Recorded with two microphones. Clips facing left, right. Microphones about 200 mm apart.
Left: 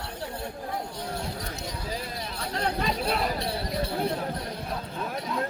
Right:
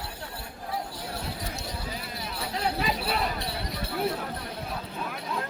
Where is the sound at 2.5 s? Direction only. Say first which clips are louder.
Left 1 dB; 5° right (ahead or behind).